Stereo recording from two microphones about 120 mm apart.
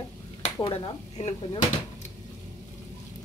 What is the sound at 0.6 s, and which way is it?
Speech, 50° left (ahead or behind).